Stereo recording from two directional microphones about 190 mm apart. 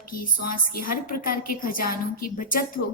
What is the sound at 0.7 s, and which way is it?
A woman's voice, 50° left (ahead or behind).